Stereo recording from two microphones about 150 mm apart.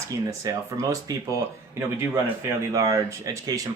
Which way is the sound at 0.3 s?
20° right (ahead or behind).